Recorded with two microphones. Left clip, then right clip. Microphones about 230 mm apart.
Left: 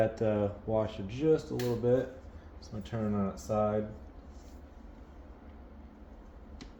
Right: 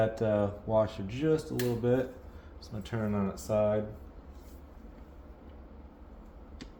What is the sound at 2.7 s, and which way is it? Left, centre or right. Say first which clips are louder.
Speech: right 1 dB; right.